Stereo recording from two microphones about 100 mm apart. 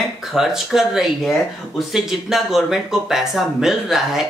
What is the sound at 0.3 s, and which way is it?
Speech, 5° right (ahead or behind).